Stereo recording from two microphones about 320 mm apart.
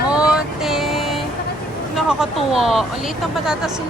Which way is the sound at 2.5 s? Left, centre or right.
Centre.